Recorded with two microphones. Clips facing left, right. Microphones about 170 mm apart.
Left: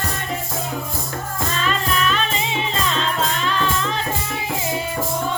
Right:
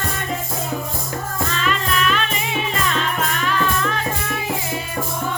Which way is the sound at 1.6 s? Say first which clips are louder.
Even; 35° left (ahead or behind).